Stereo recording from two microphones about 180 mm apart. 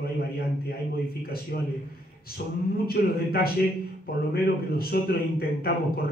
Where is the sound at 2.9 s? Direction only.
60° left (ahead or behind).